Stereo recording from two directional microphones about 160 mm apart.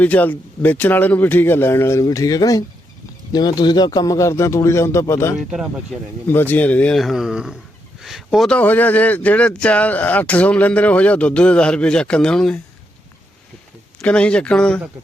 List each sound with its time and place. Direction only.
0.0 s speech: 10° left (ahead or behind)
5.5 s speech: 5° right (ahead or behind)
6.2 s speech: 10° left (ahead or behind)
14.0 s speech: 5° left (ahead or behind)